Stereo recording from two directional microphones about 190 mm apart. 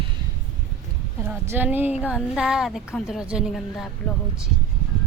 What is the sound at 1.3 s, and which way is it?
A woman's voice, 10° right (ahead or behind).